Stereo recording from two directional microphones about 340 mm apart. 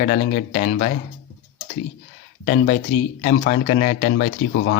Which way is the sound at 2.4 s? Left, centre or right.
Left.